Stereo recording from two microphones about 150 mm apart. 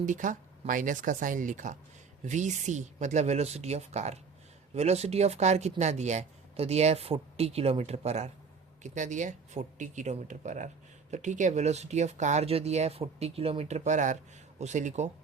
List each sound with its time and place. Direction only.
0.0 s speech: 55° right (ahead or behind)